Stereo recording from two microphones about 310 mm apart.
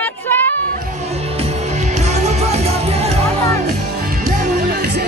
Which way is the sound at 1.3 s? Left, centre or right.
Right.